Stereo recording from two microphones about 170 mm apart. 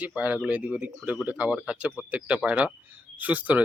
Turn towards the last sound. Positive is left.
turn(degrees=-10)  # may be behind; listen again after turning